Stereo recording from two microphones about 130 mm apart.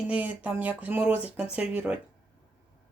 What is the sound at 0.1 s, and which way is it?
Speech, 10° right (ahead or behind).